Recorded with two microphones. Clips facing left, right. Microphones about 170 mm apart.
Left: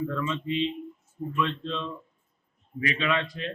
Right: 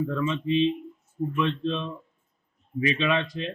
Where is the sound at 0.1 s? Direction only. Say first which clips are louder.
Right 4 dB; 20° right (ahead or behind).